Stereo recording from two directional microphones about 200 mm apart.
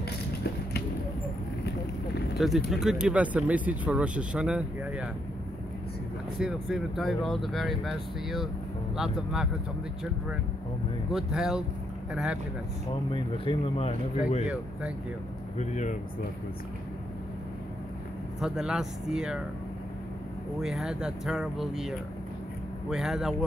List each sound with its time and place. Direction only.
2.3 s speech: centre (ahead or behind)
6.4 s speech: centre (ahead or behind)
11.1 s speech: centre (ahead or behind)
13.1 s speech: 25° left (ahead or behind)
15.5 s speech: 35° left (ahead or behind)
18.4 s speech: centre (ahead or behind)
20.6 s speech: centre (ahead or behind)